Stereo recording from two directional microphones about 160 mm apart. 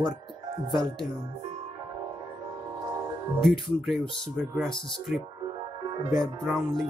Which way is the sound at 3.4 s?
Centre (ahead or behind).